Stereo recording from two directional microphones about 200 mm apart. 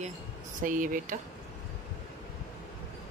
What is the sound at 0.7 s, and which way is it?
Speech, 40° right (ahead or behind).